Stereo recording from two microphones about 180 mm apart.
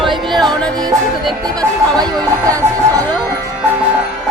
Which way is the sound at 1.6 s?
20° right (ahead or behind).